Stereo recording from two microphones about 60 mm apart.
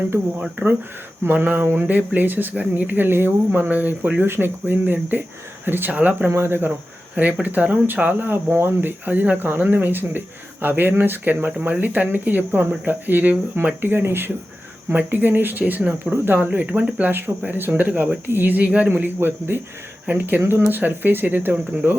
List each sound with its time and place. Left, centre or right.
1.2 s speech: right
1.9 s speech: right
6.3 s speech: right
7.4 s speech: right